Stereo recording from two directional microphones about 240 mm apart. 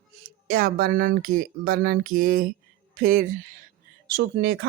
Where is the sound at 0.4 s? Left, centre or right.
Right.